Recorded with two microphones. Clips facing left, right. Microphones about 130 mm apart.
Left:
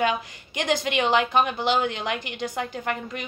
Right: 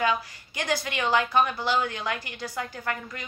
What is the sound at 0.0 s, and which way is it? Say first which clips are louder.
Speech: left 2 dB; 20° left (ahead or behind).